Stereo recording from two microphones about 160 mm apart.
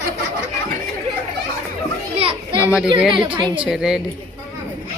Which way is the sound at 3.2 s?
30° right (ahead or behind).